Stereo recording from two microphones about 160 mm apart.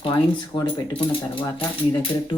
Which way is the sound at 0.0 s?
25° left (ahead or behind).